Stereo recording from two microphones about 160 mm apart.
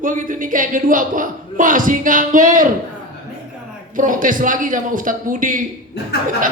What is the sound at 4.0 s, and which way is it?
Speech, 55° right (ahead or behind).